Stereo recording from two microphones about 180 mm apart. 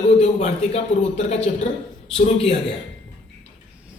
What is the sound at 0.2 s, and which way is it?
A man's voice, 40° left (ahead or behind).